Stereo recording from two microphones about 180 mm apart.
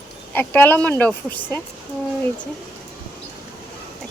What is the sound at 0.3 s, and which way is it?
Speech, 10° left (ahead or behind).